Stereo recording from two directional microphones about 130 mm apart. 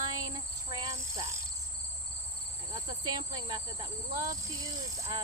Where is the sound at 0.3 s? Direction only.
35° right (ahead or behind).